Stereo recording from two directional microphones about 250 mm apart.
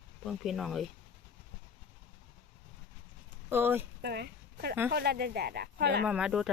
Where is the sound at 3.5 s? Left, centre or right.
Centre.